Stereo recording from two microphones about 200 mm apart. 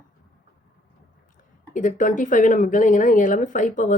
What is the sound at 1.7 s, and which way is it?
Speech, 40° left (ahead or behind).